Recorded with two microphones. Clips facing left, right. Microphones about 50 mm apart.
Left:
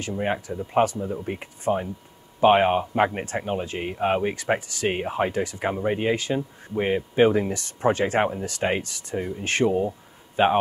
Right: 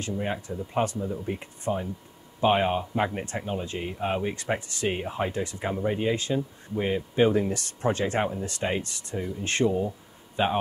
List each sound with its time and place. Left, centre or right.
0.0 s speech: left